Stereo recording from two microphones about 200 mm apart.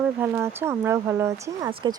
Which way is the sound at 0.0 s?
10° right (ahead or behind).